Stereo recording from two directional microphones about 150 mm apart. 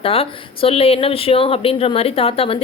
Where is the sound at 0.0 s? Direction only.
40° left (ahead or behind).